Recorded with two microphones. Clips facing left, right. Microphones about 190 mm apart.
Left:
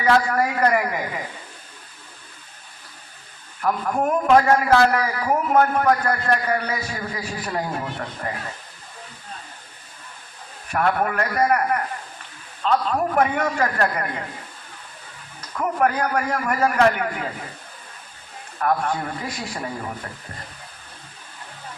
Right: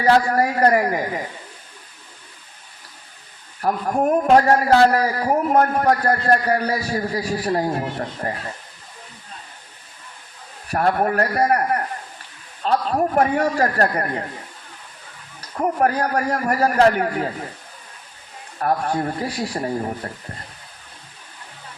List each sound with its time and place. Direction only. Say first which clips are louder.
0.0 s a man's voice: right 3 dB; 35° right (ahead or behind)
3.6 s a man's voice: right 2 dB; 35° right (ahead or behind)
10.7 s a man's voice: right 2 dB; 35° right (ahead or behind)
15.4 s a man's voice: right 2 dB; 35° right (ahead or behind)
18.6 s a man's voice: right 2 dB; 35° right (ahead or behind)